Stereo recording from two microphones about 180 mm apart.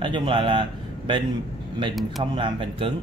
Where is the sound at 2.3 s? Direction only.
25° right (ahead or behind).